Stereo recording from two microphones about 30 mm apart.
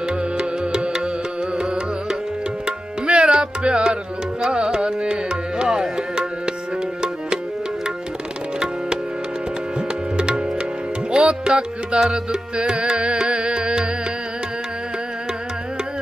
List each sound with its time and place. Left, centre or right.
0.4 s music: right
3.1 s music: right
9.8 s music: right